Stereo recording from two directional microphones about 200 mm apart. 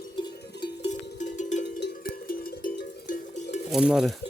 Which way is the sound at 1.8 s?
50° left (ahead or behind).